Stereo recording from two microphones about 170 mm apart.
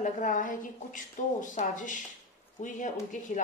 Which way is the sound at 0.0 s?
50° left (ahead or behind).